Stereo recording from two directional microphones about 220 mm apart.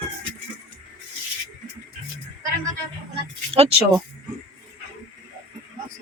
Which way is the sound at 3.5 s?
25° right (ahead or behind).